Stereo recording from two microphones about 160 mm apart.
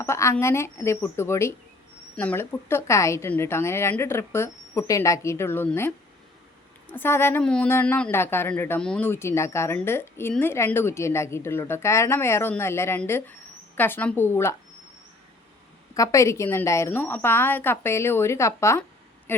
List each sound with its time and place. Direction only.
0.0 s a woman's voice: 15° left (ahead or behind)
6.9 s a woman's voice: 15° left (ahead or behind)
16.0 s a woman's voice: 20° left (ahead or behind)